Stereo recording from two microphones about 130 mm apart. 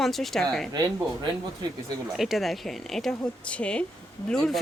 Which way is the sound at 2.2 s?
Centre (ahead or behind).